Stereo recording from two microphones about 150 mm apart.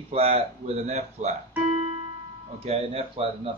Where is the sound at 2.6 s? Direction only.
40° right (ahead or behind).